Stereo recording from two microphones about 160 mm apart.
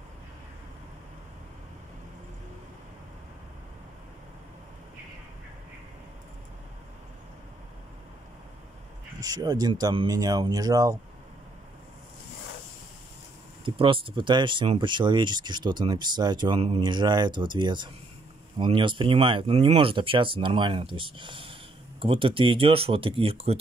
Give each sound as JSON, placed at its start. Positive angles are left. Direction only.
{"t": 9.2, "sound": "speech", "side_deg": -25}
{"t": 13.7, "sound": "speech", "side_deg": -30}